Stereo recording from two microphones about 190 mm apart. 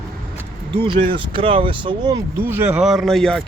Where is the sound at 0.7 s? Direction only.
25° right (ahead or behind).